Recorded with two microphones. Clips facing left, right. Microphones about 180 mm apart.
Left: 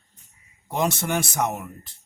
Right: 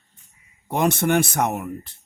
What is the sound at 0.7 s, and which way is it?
Speech, 55° right (ahead or behind).